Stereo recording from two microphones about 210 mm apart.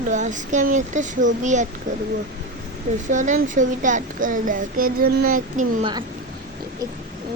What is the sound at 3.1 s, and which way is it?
Speech, 35° right (ahead or behind).